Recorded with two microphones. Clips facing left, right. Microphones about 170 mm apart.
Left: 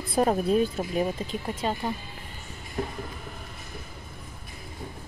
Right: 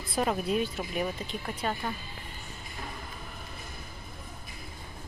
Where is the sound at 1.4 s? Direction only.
25° left (ahead or behind).